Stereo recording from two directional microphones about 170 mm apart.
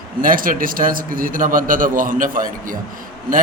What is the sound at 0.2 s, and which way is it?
A man's voice, 55° right (ahead or behind).